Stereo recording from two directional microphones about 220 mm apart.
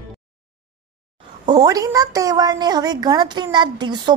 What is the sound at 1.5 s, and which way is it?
A woman's voice, 15° right (ahead or behind).